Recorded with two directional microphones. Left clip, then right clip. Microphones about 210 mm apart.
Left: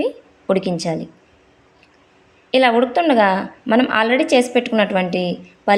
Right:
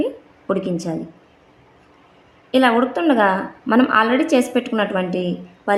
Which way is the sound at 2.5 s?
25° left (ahead or behind).